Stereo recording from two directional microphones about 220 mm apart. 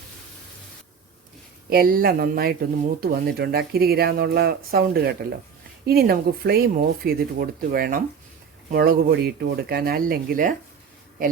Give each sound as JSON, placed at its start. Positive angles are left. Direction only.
{"t": 1.7, "sound": "speech", "side_deg": -40}